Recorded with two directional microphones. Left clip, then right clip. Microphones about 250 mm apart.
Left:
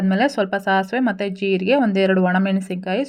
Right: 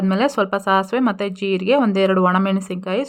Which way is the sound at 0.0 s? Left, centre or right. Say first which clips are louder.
Right 1 dB; centre.